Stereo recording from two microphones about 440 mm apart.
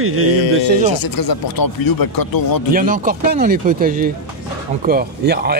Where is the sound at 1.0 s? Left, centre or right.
Left.